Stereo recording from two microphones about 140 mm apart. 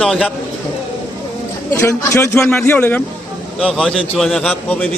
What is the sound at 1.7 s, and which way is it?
A man's voice, 20° left (ahead or behind).